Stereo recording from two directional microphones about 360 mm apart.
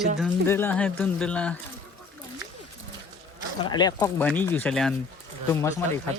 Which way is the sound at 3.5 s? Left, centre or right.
Centre.